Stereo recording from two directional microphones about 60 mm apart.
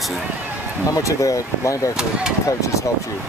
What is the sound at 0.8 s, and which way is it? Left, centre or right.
Speech, left.